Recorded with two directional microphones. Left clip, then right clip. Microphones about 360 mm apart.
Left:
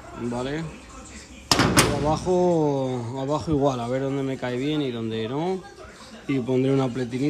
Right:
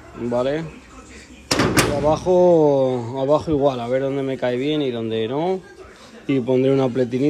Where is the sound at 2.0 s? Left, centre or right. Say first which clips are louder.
Right 7 dB; centre.